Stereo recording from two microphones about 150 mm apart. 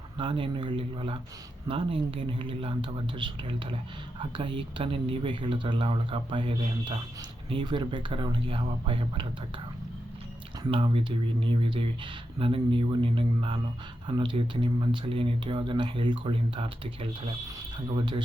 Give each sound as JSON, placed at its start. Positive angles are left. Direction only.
{"t": 0.2, "sound": "speech", "side_deg": -35}
{"t": 10.6, "sound": "speech", "side_deg": -35}